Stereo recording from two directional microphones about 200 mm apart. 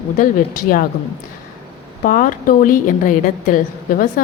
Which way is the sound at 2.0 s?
45° left (ahead or behind).